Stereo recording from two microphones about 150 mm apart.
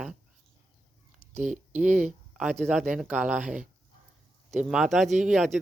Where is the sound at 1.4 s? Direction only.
60° right (ahead or behind).